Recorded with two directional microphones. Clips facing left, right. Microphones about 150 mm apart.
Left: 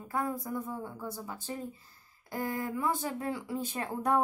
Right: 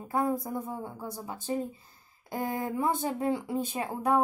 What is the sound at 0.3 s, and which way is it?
A woman's voice, 25° right (ahead or behind).